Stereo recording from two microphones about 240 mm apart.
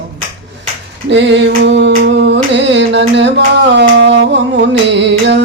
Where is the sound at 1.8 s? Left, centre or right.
Right.